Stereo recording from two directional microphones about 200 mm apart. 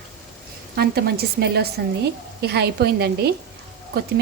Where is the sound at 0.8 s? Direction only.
50° right (ahead or behind).